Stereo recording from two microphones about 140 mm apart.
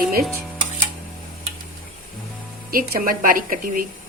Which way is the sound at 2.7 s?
90° right.